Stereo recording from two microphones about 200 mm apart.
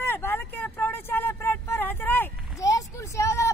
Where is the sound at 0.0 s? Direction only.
10° left (ahead or behind).